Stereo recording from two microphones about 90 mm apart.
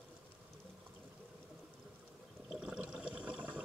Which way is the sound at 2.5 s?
10° right (ahead or behind).